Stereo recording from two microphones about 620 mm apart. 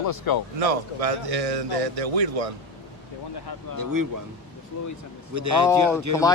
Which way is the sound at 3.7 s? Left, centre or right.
Right.